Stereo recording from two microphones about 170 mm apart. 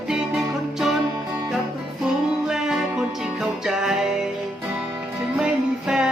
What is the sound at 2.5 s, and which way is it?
Music, 5° right (ahead or behind).